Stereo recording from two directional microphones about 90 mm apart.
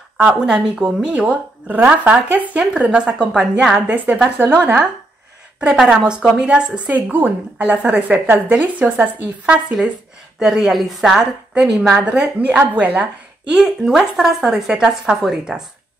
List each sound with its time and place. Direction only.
0.2 s a woman's voice: 10° right (ahead or behind)
5.6 s a woman's voice: 10° right (ahead or behind)
12.0 s a woman's voice: 15° right (ahead or behind)